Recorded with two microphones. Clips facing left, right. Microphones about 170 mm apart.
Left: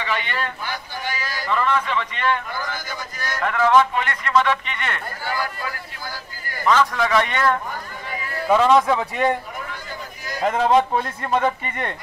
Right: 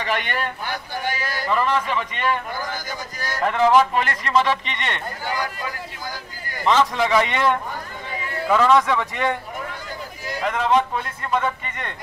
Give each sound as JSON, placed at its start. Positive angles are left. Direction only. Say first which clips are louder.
{"t": 0.0, "sound": "speech", "louder": "right 1 dB", "side_deg": -50}
{"t": 1.5, "sound": "a man's voice", "louder": "even", "side_deg": -5}
{"t": 2.5, "sound": "a man's voice", "louder": "even", "side_deg": -40}
{"t": 5.2, "sound": "a man's voice", "louder": "left 1 dB", "side_deg": -20}
{"t": 8.5, "sound": "speech", "louder": "left 1 dB", "side_deg": 20}
{"t": 9.1, "sound": "speech", "louder": "left 3 dB", "side_deg": 35}
{"t": 10.4, "sound": "speech", "louder": "left 3 dB", "side_deg": 40}